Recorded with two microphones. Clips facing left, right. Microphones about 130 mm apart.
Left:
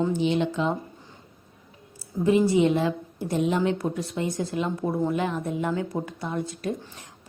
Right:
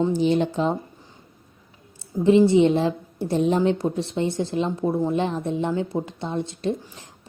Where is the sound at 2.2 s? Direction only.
25° right (ahead or behind).